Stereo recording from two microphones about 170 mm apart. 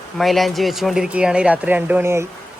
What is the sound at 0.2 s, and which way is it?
Speech, centre (ahead or behind).